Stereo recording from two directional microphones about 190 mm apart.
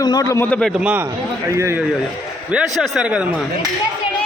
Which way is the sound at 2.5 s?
5° right (ahead or behind).